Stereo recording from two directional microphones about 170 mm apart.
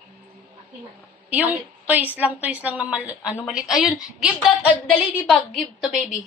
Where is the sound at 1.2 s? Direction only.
10° right (ahead or behind).